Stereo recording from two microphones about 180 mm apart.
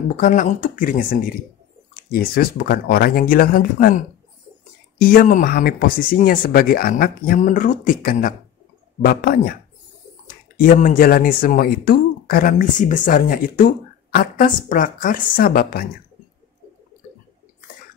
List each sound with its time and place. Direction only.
0.1 s speech: 45° left (ahead or behind)
10.6 s speech: 50° left (ahead or behind)